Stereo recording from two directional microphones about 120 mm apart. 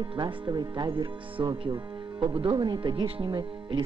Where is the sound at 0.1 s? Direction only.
35° right (ahead or behind).